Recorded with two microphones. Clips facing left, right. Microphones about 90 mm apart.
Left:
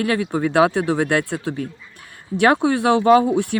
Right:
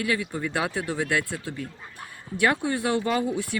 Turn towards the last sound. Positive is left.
turn(degrees=70)  # may be behind; listen again after turning